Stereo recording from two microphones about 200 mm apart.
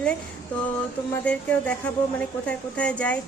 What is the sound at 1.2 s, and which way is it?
A woman's voice, 5° left (ahead or behind).